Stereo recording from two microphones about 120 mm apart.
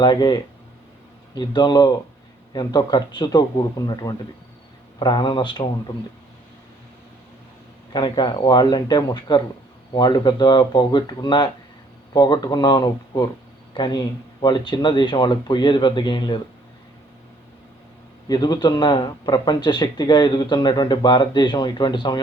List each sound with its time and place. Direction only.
0.0 s a man's voice: 40° left (ahead or behind)
7.9 s a man's voice: 40° left (ahead or behind)
18.3 s a man's voice: 35° left (ahead or behind)